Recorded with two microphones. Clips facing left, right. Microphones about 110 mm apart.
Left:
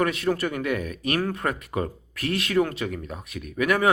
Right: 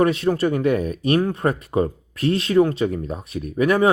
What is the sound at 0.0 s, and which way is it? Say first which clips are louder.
Speech: right 6 dB; 30° right (ahead or behind).